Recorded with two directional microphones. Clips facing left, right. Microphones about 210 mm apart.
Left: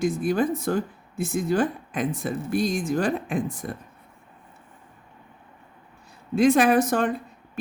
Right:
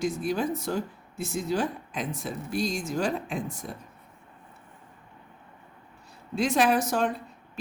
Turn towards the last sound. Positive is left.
turn(degrees=55)  # may be behind; listen again after turning